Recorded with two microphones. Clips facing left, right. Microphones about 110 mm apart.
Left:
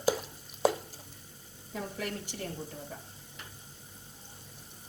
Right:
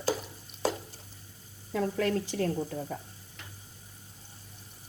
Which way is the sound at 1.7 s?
90° right.